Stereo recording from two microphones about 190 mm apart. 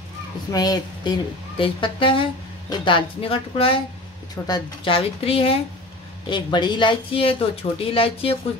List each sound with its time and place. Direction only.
0.5 s speech: 20° left (ahead or behind)